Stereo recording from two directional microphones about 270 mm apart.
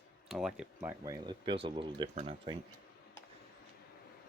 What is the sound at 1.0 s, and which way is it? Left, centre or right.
Speech, centre.